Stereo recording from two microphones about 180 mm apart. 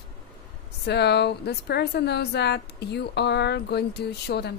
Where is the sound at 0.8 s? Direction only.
70° left (ahead or behind).